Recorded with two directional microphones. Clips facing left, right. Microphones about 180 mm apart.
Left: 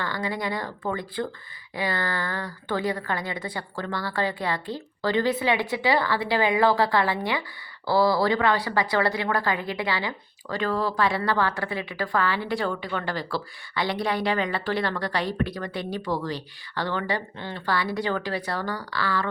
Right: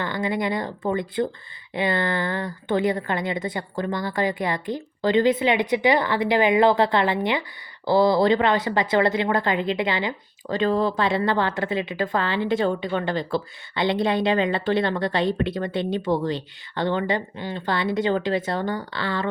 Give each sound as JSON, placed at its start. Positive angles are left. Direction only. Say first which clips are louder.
{"t": 0.0, "sound": "speech", "louder": "right 4 dB", "side_deg": -20}